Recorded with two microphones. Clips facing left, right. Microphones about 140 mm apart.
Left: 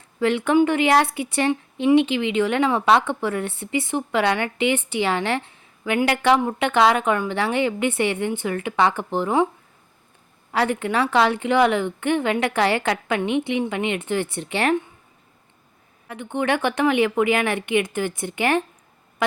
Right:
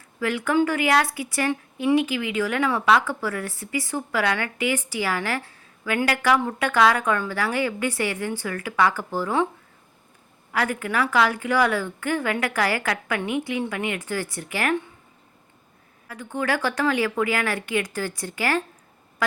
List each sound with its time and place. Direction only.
0.2 s a woman's voice: 25° left (ahead or behind)
10.5 s a woman's voice: 25° left (ahead or behind)
16.0 s a woman's voice: 25° left (ahead or behind)